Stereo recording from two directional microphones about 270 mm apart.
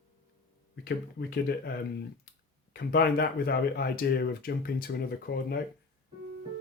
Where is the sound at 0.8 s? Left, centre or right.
Left.